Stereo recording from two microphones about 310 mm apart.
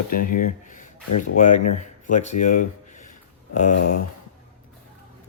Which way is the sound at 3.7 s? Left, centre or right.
Left.